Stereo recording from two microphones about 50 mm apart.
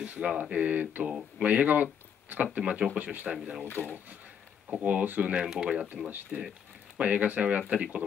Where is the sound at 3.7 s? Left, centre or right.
Left.